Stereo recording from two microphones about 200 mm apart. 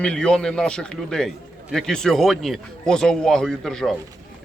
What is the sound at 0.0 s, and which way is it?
Speech, 5° left (ahead or behind).